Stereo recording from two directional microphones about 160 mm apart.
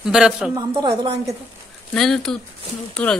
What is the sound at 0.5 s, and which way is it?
Speech, 25° right (ahead or behind).